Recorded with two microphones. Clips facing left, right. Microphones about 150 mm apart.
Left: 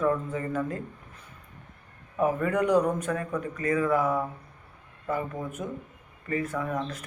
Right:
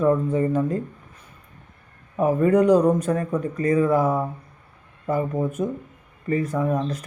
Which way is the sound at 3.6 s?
35° right (ahead or behind).